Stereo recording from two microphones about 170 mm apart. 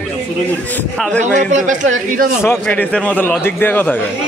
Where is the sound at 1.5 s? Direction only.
45° right (ahead or behind).